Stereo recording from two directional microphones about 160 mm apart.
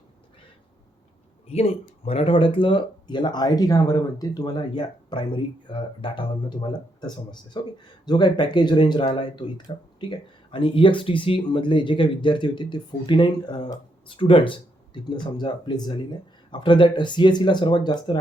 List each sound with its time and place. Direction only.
1.5 s speech: 40° left (ahead or behind)